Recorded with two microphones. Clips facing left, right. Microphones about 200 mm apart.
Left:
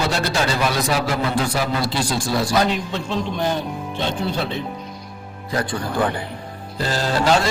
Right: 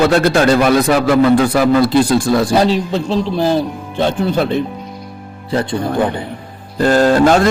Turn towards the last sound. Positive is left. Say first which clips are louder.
# right 9 dB
turn(degrees=-50)  # may be behind; listen again after turning